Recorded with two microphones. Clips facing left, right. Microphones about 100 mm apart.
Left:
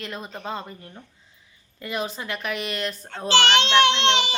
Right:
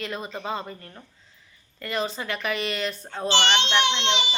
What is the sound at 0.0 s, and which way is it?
Speech, centre (ahead or behind).